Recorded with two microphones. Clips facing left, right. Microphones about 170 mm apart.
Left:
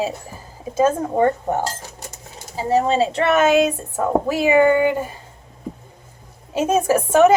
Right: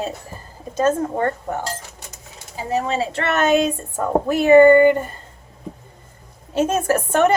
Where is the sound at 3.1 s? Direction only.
10° left (ahead or behind).